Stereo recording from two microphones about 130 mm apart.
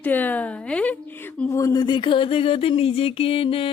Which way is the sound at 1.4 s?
25° left (ahead or behind).